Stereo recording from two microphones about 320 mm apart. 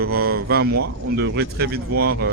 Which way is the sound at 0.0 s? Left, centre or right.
Right.